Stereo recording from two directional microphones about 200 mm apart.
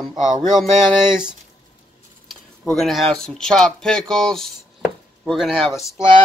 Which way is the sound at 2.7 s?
Centre (ahead or behind).